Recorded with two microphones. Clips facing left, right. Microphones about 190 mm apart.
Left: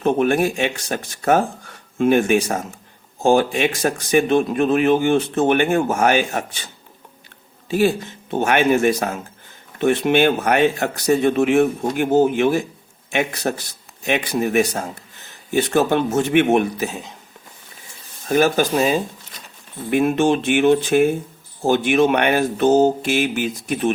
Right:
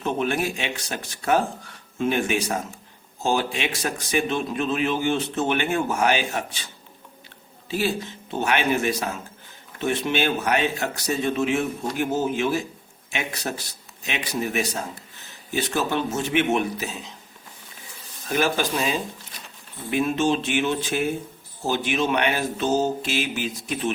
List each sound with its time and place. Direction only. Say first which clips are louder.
0.0 s speech: left 7 dB; 50° left (ahead or behind)
7.7 s a man's voice: left 7 dB; 50° left (ahead or behind)
18.3 s speech: left 7 dB; 45° left (ahead or behind)